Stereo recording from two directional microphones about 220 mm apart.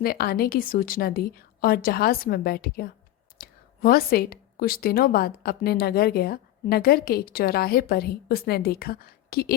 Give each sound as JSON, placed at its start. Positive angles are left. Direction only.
{"t": 0.0, "sound": "speech", "side_deg": 45}